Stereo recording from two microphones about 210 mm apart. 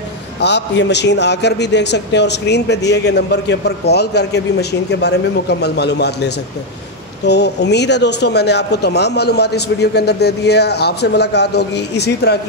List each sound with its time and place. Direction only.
0.4 s a man's voice: 55° left (ahead or behind)